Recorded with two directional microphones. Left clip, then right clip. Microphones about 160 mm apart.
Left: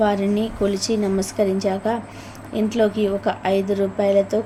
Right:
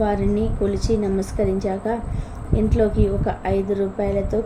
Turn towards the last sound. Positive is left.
turn(degrees=15)  # may be behind; listen again after turning